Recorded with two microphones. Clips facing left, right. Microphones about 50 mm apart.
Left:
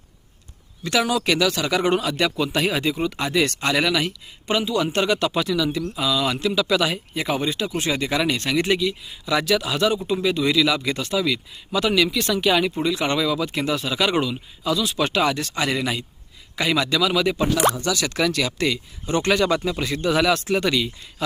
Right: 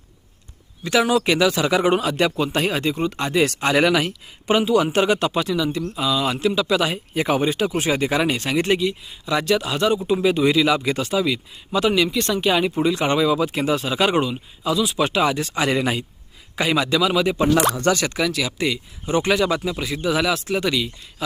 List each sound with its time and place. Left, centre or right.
0.9 s speech: centre
3.7 s speech: right
4.9 s speech: centre
7.2 s speech: right
17.7 s speech: right
18.2 s speech: centre